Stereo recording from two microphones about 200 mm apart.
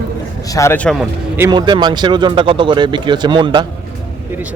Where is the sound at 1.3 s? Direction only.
20° right (ahead or behind).